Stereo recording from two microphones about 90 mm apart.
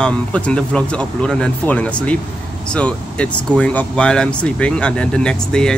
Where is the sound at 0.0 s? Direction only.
15° left (ahead or behind).